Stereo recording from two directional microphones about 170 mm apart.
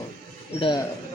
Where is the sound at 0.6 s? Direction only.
25° left (ahead or behind).